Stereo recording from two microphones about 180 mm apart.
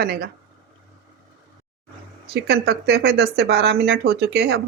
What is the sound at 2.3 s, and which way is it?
Speech, 65° right (ahead or behind).